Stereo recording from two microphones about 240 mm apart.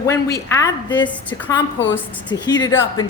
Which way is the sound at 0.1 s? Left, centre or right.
Centre.